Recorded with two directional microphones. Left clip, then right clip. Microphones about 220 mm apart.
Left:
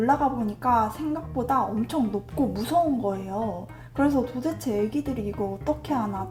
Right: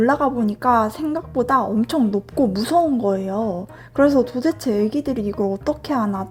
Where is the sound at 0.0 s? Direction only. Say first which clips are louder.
Right 5 dB; 50° right (ahead or behind).